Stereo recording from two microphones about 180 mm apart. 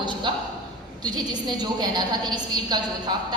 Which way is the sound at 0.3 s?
25° right (ahead or behind).